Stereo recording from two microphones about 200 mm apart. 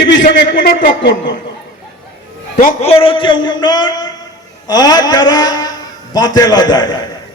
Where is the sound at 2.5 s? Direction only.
45° left (ahead or behind); by 7.0 s 20° left (ahead or behind).